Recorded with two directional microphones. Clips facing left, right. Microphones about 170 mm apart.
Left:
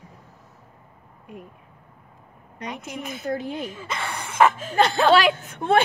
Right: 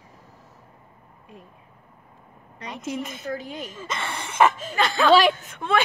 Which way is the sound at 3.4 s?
60° left (ahead or behind).